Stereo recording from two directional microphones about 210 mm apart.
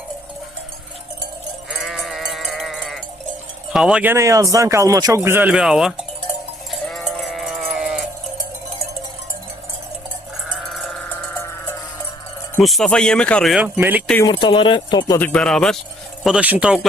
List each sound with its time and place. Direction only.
1.8 s sheep: centre (ahead or behind)
3.7 s speech: 5° right (ahead or behind)
6.7 s sheep: centre (ahead or behind)
10.8 s cowbell: centre (ahead or behind)
12.5 s speech: centre (ahead or behind)
14.3 s speech: 20° left (ahead or behind)
15.3 s speech: 5° left (ahead or behind)